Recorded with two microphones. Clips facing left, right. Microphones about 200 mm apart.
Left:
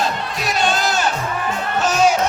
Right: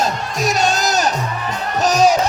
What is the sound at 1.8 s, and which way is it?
Music, 40° right (ahead or behind).